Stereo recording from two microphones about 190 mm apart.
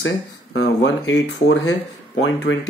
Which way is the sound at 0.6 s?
80° left.